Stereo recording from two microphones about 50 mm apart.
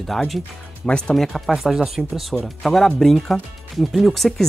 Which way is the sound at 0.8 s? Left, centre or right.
Centre.